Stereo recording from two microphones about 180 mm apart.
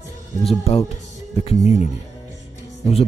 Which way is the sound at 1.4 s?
35° left (ahead or behind).